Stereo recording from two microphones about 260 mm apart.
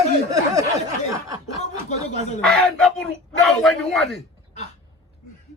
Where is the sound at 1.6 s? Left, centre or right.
Left.